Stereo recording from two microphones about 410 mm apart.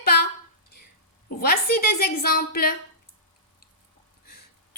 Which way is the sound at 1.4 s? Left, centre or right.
Left.